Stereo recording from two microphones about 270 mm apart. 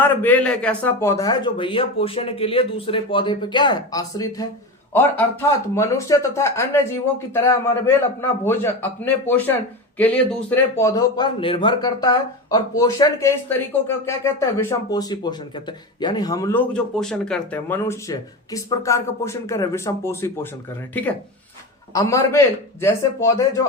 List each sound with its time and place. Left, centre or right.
0.0 s a man's voice: centre
21.9 s a man's voice: centre